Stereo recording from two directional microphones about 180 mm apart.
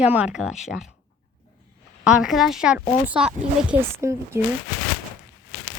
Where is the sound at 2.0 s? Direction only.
Centre (ahead or behind).